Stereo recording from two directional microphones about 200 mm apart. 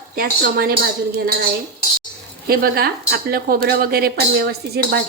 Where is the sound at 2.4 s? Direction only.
50° right (ahead or behind).